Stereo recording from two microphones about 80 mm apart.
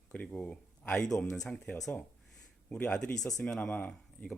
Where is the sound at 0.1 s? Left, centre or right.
Centre.